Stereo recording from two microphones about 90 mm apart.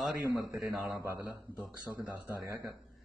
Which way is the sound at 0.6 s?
5° right (ahead or behind).